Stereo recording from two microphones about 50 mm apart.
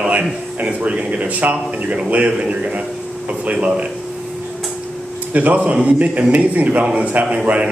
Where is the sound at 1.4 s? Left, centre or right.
Right.